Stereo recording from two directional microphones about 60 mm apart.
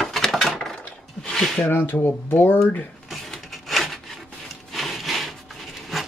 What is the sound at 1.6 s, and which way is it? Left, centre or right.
Speech, left.